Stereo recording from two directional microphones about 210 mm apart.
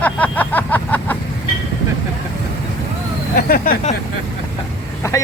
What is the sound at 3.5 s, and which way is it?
Speech, 45° left (ahead or behind).